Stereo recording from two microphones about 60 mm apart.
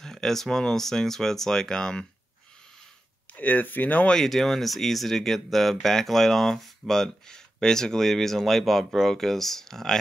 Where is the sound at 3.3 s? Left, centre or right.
Left.